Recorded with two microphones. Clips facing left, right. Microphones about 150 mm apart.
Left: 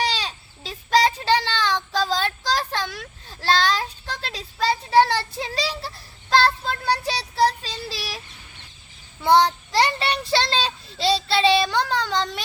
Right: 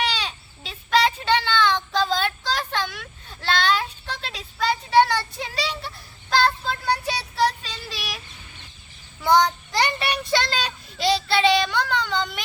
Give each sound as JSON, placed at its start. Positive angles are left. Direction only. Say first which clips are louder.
{"t": 0.0, "sound": "a sound", "louder": "left 1 dB", "side_deg": 35}
{"t": 2.0, "sound": "child singing", "louder": "left 1 dB", "side_deg": 35}
{"t": 7.0, "sound": "child singing", "louder": "left 2 dB", "side_deg": 30}
{"t": 9.2, "sound": "child singing", "louder": "left 1 dB", "side_deg": 30}